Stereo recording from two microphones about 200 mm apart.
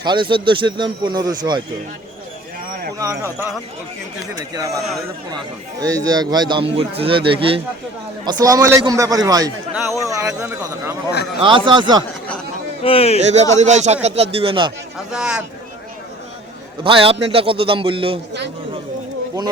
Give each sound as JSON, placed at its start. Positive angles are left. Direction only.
{"t": 0.0, "sound": "a man's voice", "side_deg": -25}
{"t": 3.0, "sound": "a man's voice", "side_deg": -15}
{"t": 5.8, "sound": "a man's voice", "side_deg": -20}
{"t": 11.3, "sound": "a man's voice", "side_deg": -25}
{"t": 12.8, "sound": "speech", "side_deg": 30}
{"t": 13.1, "sound": "speech", "side_deg": -35}
{"t": 14.9, "sound": "speech", "side_deg": -5}
{"t": 16.8, "sound": "a man's voice", "side_deg": -25}